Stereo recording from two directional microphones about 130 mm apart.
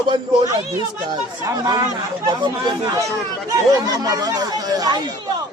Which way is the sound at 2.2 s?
35° right (ahead or behind).